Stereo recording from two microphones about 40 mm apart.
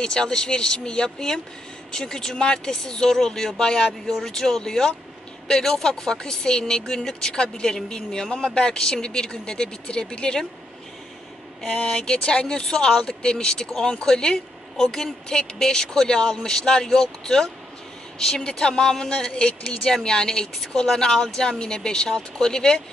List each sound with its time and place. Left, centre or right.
0.0 s speech: centre
11.6 s speech: centre